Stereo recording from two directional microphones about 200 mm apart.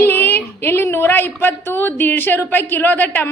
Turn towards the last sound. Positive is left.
turn(degrees=10)  # may be behind; listen again after turning